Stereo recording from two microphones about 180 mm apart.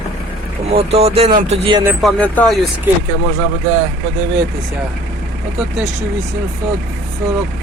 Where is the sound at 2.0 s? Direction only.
5° left (ahead or behind).